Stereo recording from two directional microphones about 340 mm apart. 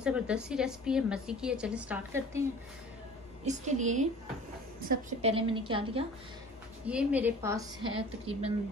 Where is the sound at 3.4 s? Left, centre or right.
Right.